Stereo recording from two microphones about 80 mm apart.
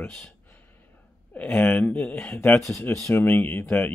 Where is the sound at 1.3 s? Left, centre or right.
Left.